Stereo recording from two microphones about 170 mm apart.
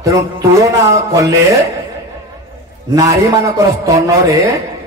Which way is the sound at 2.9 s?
20° right (ahead or behind).